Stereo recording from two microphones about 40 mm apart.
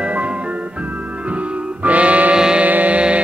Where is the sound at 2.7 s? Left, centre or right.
Right.